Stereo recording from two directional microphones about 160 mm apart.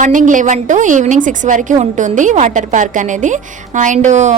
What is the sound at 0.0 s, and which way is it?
A woman's voice, 55° right (ahead or behind).